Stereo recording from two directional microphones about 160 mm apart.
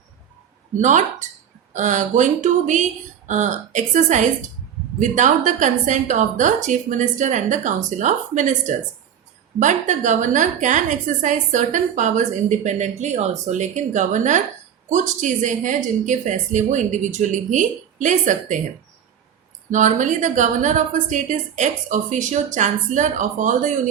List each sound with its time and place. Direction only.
0.8 s a woman's voice: 50° right (ahead or behind)
19.7 s a woman's voice: 50° right (ahead or behind)